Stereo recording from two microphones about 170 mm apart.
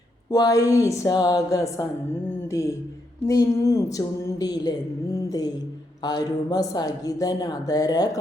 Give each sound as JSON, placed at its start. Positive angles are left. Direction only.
{"t": 0.3, "sound": "speech", "side_deg": 20}
{"t": 3.2, "sound": "speech", "side_deg": 20}
{"t": 5.1, "sound": "music", "side_deg": 20}
{"t": 6.0, "sound": "speech", "side_deg": 25}